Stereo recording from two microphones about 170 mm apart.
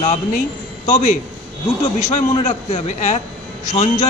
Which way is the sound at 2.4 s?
45° left (ahead or behind).